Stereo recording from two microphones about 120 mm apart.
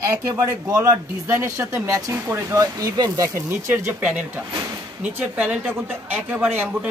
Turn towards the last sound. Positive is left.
turn(degrees=-15)  # may be behind; listen again after turning